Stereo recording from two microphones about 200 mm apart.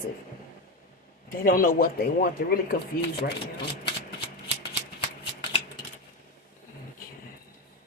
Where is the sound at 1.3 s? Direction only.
45° left (ahead or behind).